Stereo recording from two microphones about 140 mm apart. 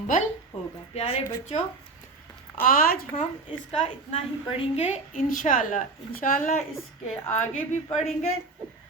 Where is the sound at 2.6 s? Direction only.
90° left.